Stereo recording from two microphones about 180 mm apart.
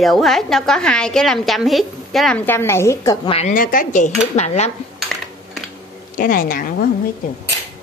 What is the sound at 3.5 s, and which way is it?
Speech, 50° left (ahead or behind).